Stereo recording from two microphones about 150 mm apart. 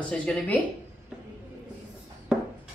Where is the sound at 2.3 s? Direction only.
Centre (ahead or behind).